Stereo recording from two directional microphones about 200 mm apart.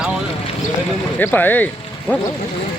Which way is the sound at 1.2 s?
10° left (ahead or behind).